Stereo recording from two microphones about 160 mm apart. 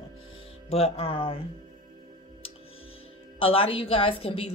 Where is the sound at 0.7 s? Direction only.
40° left (ahead or behind).